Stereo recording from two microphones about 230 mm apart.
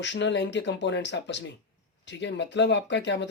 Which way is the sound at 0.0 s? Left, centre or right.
Left.